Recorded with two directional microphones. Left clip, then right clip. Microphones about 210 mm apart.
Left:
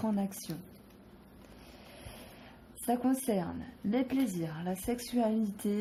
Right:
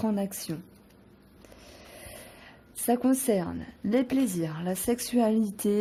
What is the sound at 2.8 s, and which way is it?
Speech, 50° right (ahead or behind).